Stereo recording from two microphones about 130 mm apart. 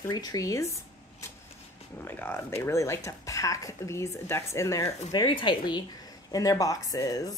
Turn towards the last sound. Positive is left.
turn(degrees=25)  # may be behind; listen again after turning